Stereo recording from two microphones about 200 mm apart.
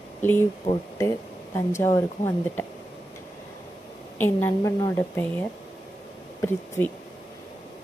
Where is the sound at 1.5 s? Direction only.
15° left (ahead or behind).